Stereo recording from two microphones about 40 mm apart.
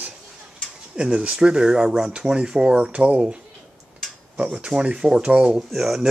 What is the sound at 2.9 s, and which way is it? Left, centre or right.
Speech, right.